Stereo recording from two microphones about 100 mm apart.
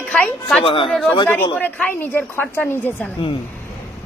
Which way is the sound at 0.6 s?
60° left (ahead or behind).